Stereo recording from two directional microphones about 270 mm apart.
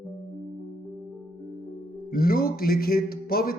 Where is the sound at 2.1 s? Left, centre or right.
Left.